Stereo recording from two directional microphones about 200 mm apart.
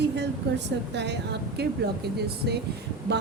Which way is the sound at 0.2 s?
60° right (ahead or behind).